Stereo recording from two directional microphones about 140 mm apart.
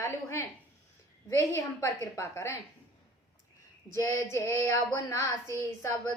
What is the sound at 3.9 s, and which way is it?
A woman's voice, 20° left (ahead or behind).